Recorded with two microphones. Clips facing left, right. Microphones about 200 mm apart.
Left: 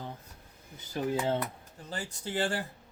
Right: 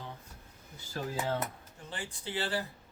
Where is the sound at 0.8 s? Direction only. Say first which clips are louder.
Left 4 dB; 20° left (ahead or behind).